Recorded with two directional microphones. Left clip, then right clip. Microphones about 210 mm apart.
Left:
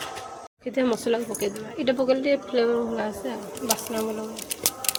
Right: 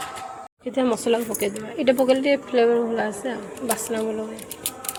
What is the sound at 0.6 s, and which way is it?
Speech, centre (ahead or behind).